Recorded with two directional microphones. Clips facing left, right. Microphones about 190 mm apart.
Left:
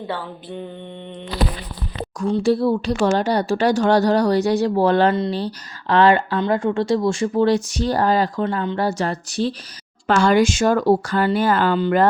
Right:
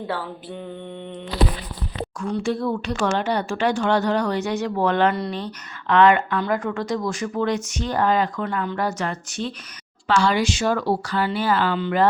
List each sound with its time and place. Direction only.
2.1 s speech: 35° left (ahead or behind)
10.1 s speech: 50° left (ahead or behind)